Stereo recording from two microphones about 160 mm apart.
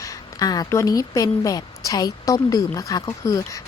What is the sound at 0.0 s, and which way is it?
A woman's voice, 25° left (ahead or behind).